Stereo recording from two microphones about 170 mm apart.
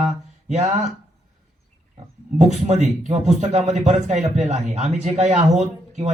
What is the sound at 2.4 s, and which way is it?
A man's voice, 40° right (ahead or behind).